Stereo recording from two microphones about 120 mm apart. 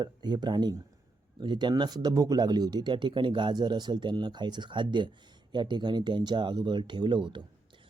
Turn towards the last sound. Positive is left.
turn(degrees=-40)  # may be behind; listen again after turning